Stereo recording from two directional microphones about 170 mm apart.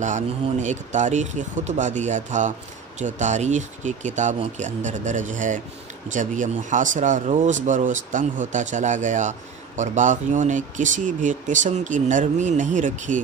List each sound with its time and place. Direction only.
0.0 s speech: 45° right (ahead or behind)